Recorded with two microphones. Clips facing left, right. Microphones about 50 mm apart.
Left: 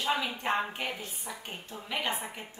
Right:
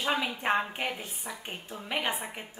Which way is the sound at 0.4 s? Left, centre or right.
Centre.